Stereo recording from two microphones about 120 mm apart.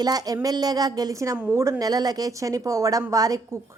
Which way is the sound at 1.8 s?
35° right (ahead or behind).